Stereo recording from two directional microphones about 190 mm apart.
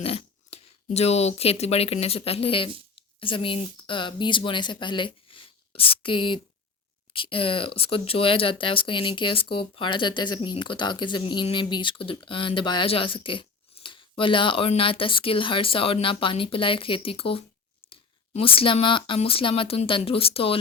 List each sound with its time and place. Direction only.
0.0 s speech: 30° left (ahead or behind)